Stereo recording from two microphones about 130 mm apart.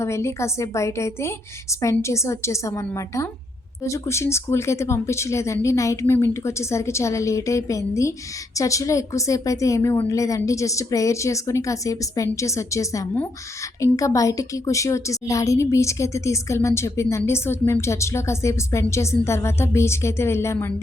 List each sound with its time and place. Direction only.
0.0 s a woman's voice: 20° left (ahead or behind)